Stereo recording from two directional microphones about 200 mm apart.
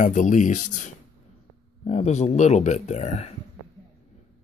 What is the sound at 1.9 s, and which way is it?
Speech, 35° left (ahead or behind).